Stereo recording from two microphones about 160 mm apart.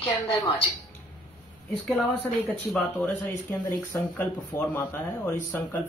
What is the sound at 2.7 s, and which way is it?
Speech, 10° left (ahead or behind).